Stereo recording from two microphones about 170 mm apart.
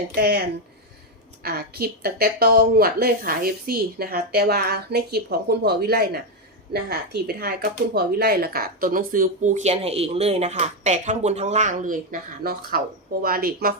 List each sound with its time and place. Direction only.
0.1 s a woman's voice: 65° right (ahead or behind)